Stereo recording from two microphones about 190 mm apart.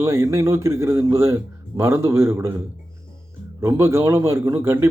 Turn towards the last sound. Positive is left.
turn(degrees=-15)  # may be behind; listen again after turning